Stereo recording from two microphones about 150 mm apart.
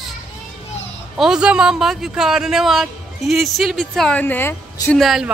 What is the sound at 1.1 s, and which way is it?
Speech, 5° right (ahead or behind).